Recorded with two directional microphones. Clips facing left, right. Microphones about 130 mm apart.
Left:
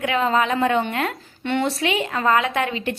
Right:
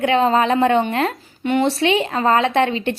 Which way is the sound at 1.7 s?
30° right (ahead or behind).